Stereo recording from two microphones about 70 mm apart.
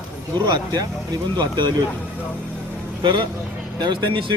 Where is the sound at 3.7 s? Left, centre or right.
Right.